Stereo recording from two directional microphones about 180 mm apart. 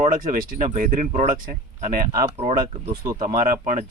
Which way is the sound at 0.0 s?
45° right (ahead or behind).